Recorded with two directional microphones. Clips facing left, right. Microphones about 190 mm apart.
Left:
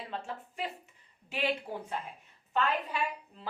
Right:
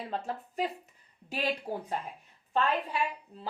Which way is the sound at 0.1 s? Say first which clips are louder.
Right 4 dB; 40° right (ahead or behind).